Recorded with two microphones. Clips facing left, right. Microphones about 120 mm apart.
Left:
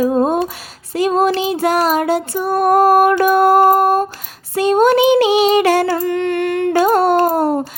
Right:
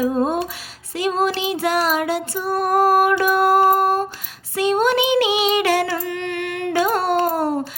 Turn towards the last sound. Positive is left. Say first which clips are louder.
# left 6 dB
turn(degrees=45)  # may be behind; listen again after turning